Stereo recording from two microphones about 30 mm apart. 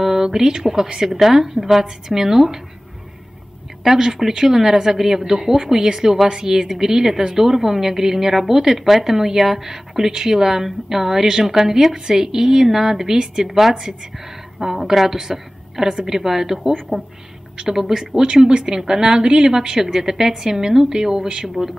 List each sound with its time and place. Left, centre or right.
0.0 s a sound: centre
0.9 s a woman's voice: centre
3.8 s a woman's voice: centre
13.5 s a woman's voice: centre
18.2 s a woman's voice: right